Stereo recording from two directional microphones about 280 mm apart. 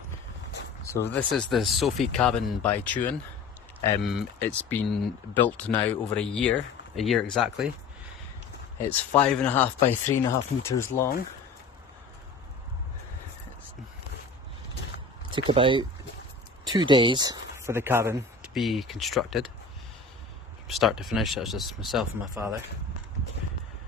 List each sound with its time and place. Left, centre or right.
0.9 s speech: centre
8.9 s speech: centre
15.3 s speech: centre
20.7 s speech: centre